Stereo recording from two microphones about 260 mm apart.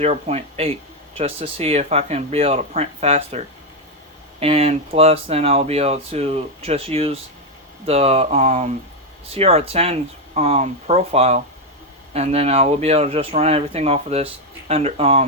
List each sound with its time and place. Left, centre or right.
0.0 s speech: right